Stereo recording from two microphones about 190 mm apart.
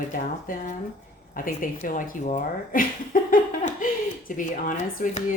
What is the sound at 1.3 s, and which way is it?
Speech, 45° left (ahead or behind).